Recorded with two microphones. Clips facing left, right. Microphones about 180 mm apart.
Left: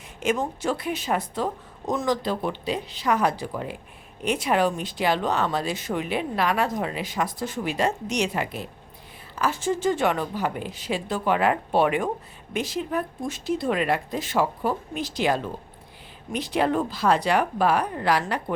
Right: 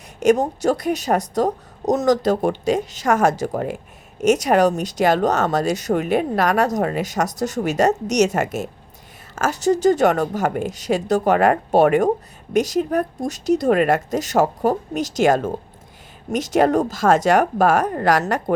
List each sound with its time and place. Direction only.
0.2 s speech: 40° right (ahead or behind)